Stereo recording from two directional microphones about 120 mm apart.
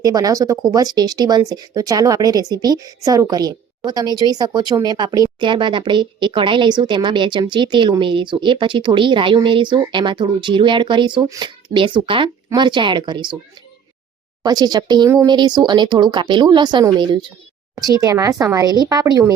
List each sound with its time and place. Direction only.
0.0 s speech: 30° right (ahead or behind)
14.4 s speech: 35° right (ahead or behind)
17.7 s speech: 30° right (ahead or behind)